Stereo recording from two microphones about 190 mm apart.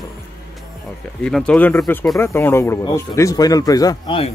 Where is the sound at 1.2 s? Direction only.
5° left (ahead or behind).